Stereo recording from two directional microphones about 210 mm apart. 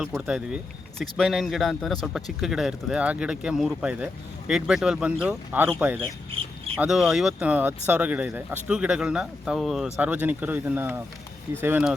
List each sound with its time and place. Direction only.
0.0 s speech: 5° right (ahead or behind)